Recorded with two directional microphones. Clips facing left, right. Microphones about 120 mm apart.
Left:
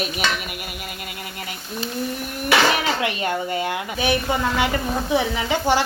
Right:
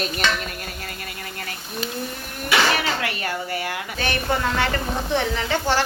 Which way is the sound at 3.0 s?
20° left (ahead or behind).